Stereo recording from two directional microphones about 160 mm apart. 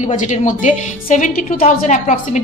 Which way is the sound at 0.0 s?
50° left (ahead or behind).